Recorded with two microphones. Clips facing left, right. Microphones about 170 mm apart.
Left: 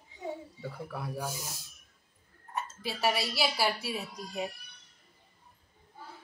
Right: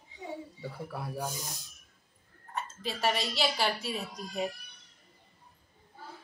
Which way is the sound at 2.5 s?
10° left (ahead or behind).